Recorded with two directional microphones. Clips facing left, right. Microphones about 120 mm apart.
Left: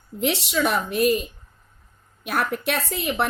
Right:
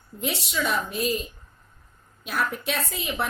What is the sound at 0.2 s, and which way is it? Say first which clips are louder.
Speech: left 6 dB; 70° left (ahead or behind).